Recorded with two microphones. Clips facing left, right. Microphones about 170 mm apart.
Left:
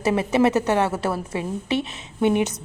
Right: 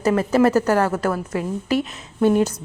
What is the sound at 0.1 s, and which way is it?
A woman's voice, 20° left (ahead or behind).